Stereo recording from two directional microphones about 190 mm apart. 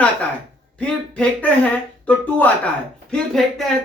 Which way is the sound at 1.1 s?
5° left (ahead or behind).